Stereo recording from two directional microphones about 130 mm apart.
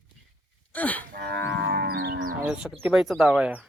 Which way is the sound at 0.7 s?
10° left (ahead or behind).